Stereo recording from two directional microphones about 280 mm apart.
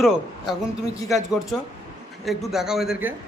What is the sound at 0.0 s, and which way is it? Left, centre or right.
A woman's voice, centre.